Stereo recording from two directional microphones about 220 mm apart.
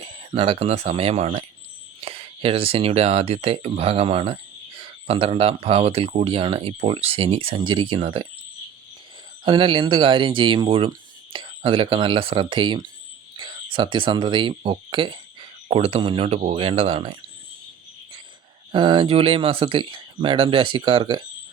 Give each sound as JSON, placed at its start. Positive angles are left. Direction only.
{"t": 0.0, "sound": "speech", "side_deg": -25}
{"t": 9.4, "sound": "speech", "side_deg": -20}
{"t": 18.7, "sound": "speech", "side_deg": -20}